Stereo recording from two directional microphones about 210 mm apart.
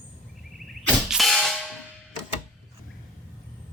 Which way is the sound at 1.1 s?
Centre (ahead or behind).